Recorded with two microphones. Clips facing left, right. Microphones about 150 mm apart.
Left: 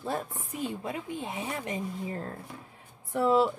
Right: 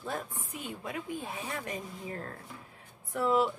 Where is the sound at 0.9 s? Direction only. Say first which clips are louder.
Left 2 dB; 20° left (ahead or behind).